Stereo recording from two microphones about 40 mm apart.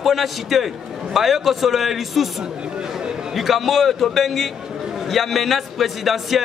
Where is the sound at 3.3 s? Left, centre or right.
Centre.